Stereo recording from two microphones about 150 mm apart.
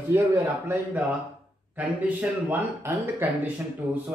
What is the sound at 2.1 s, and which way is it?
A man's voice, 10° right (ahead or behind).